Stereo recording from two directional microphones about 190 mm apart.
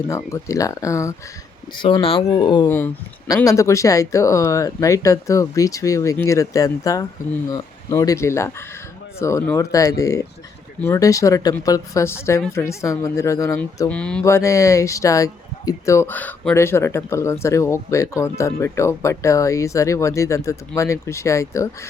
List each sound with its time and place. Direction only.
0.3 s speech: 15° left (ahead or behind)
1.8 s speech: 30° left (ahead or behind)
2.6 s speech: 10° left (ahead or behind)